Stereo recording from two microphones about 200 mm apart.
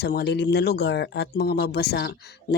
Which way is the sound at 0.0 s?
55° left (ahead or behind).